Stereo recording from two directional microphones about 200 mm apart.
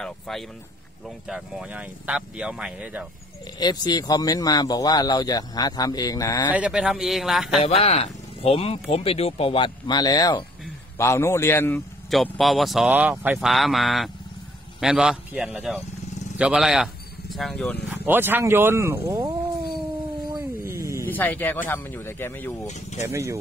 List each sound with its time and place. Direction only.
0.0 s speech: centre (ahead or behind)
3.5 s speech: 20° left (ahead or behind)
6.5 s speech: 5° right (ahead or behind)
7.6 s speech: 30° left (ahead or behind); by 11.8 s 10° left (ahead or behind)
12.1 s speech: centre (ahead or behind)
17.8 s speech: 10° right (ahead or behind)
20.6 s a sound: 15° right (ahead or behind)
21.0 s speech: 10° left (ahead or behind)
22.7 s speech: 35° left (ahead or behind)
23.0 s speech: 15° right (ahead or behind)